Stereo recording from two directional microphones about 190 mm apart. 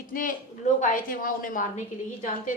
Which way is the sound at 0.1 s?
45° left (ahead or behind).